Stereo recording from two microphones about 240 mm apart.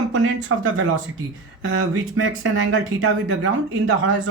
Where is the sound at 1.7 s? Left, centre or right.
Right.